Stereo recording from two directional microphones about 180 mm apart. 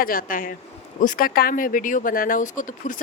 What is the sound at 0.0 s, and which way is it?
Speech, 55° left (ahead or behind).